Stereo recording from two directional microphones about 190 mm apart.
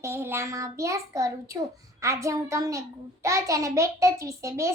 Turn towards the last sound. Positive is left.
turn(degrees=-15)  # may be behind; listen again after turning